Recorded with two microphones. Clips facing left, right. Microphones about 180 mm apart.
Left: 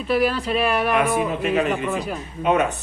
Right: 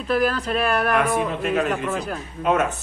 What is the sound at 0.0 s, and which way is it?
A man's voice, 5° left (ahead or behind).